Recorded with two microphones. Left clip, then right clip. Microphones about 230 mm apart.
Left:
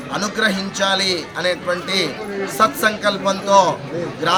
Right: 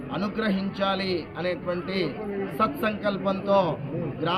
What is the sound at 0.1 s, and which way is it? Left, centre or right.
A man's voice, left.